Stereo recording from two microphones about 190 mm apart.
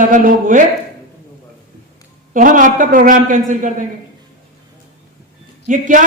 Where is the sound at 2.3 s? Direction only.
45° right (ahead or behind).